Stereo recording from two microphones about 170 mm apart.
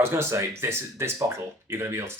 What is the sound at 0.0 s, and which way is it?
Speech, 15° right (ahead or behind).